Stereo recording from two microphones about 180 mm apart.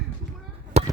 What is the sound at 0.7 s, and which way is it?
Chop, 35° right (ahead or behind).